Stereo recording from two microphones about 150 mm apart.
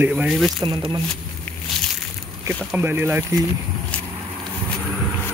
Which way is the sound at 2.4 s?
15° right (ahead or behind).